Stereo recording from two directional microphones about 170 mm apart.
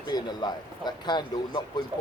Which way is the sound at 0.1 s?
25° left (ahead or behind).